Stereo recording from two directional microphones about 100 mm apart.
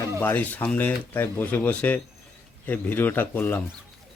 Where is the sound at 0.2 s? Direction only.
20° left (ahead or behind).